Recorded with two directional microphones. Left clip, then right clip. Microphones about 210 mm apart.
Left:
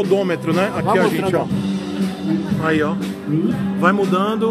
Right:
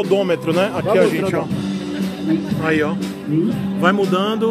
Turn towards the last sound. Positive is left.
turn(degrees=-10)  # may be behind; listen again after turning